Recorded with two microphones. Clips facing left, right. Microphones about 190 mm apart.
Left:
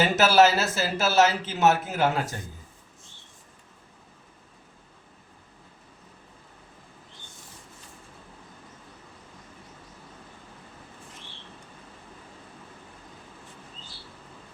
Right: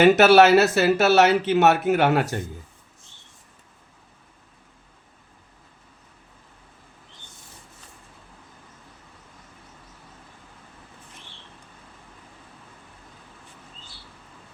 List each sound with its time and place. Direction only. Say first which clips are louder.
0.0 s speech: right 6 dB; 65° right (ahead or behind)